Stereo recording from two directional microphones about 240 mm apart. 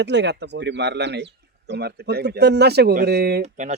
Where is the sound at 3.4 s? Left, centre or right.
Right.